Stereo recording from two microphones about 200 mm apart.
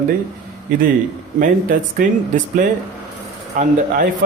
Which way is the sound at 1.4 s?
40° right (ahead or behind).